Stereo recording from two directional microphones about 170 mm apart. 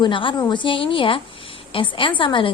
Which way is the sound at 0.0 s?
30° left (ahead or behind).